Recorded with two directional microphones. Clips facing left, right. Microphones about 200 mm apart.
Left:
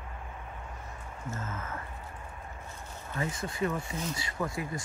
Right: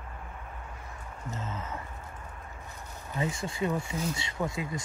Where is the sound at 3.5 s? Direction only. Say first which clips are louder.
Right 1 dB; 25° right (ahead or behind).